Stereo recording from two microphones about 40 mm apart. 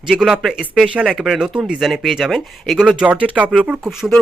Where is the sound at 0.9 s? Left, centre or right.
Right.